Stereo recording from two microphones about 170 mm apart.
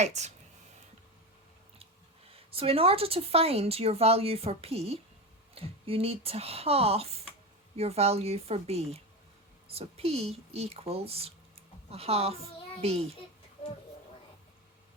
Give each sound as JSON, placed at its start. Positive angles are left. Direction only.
{"t": 0.0, "sound": "speech", "side_deg": -40}
{"t": 1.8, "sound": "speech", "side_deg": -35}